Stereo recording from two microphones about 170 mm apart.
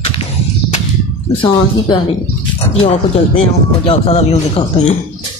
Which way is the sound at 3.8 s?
35° left (ahead or behind).